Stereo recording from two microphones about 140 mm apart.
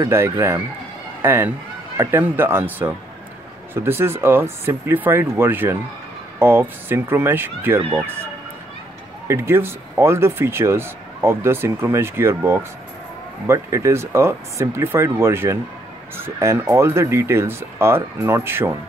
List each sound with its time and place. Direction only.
0.0 s speech: 20° right (ahead or behind)
9.3 s speech: 15° right (ahead or behind)